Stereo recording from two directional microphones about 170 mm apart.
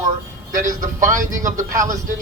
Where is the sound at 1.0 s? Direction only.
50° right (ahead or behind).